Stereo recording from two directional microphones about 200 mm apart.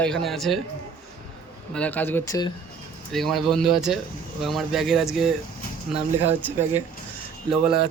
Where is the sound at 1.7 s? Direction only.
5° left (ahead or behind).